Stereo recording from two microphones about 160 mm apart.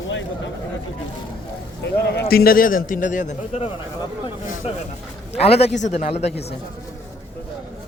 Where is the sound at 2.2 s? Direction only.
70° left (ahead or behind); by 3.7 s 45° left (ahead or behind).